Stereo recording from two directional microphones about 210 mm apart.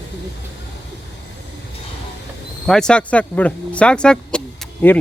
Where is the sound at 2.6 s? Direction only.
5° left (ahead or behind).